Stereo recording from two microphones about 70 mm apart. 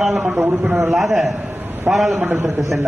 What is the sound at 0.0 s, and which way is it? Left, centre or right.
Speech, centre.